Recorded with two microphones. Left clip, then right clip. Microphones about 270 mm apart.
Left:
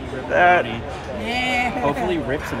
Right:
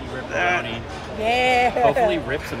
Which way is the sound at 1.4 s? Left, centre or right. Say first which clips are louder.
Right 3 dB; right.